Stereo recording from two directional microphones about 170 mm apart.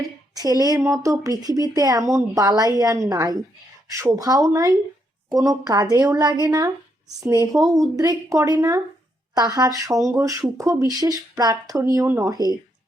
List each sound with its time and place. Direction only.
0.3 s a woman's voice: 20° right (ahead or behind)